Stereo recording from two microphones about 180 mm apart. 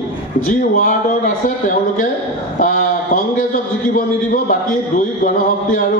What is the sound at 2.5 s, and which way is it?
Speech, 45° left (ahead or behind).